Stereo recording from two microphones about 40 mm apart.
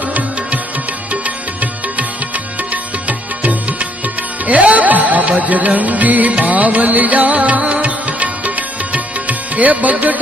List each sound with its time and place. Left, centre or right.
0.0 s music: right